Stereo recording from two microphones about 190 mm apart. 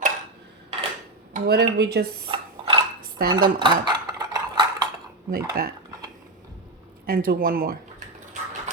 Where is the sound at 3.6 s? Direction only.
25° right (ahead or behind).